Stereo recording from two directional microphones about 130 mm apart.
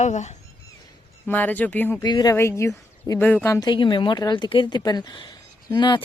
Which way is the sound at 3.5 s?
35° left (ahead or behind).